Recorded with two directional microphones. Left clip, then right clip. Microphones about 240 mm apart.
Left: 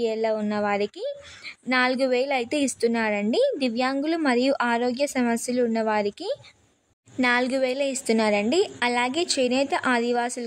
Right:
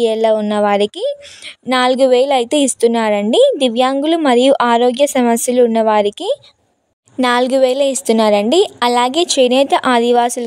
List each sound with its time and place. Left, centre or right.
0.0 s a woman's voice: right